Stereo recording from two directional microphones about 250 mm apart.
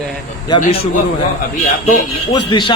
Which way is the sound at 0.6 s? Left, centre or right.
Left.